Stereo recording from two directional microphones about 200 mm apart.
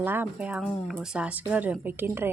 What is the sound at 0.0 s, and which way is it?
Speech, 10° right (ahead or behind).